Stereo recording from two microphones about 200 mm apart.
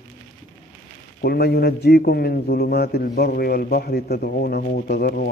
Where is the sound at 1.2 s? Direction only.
50° left (ahead or behind).